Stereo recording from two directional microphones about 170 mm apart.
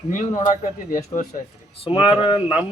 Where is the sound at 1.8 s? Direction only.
30° left (ahead or behind).